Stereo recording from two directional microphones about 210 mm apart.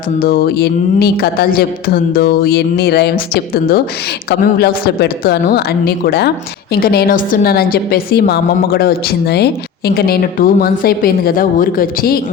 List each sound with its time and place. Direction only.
0.2 s a woman's voice: 45° left (ahead or behind)